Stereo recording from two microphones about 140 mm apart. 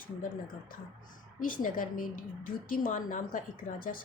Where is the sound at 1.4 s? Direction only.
75° left (ahead or behind).